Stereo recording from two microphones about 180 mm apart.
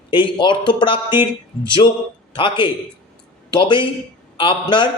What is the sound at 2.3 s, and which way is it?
A man's voice, 30° left (ahead or behind).